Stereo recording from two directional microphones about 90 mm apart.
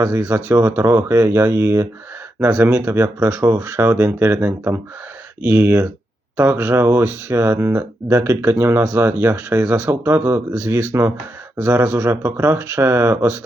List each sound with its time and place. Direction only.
0.0 s speech: 30° right (ahead or behind)